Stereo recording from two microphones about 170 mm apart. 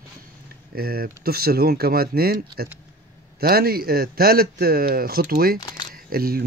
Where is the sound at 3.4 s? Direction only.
65° right (ahead or behind).